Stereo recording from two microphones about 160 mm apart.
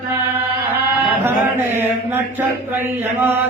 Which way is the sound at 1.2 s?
15° right (ahead or behind).